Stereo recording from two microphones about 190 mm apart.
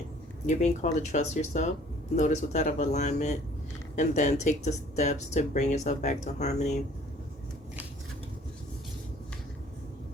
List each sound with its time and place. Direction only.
0.4 s speech: 40° left (ahead or behind)